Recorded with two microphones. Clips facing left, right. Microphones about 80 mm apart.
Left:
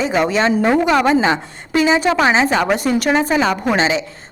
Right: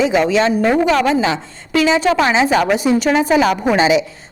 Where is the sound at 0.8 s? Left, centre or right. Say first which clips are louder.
Even; centre.